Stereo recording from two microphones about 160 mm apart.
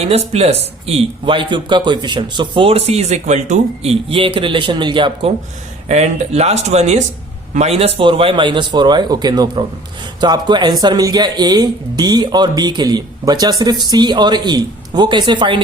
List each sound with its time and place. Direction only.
0.0 s speech: 40° right (ahead or behind)
5.9 s speech: 45° right (ahead or behind)